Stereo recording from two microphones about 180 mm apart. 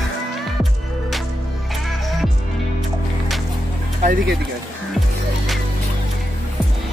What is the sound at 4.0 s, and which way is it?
Music, 50° right (ahead or behind).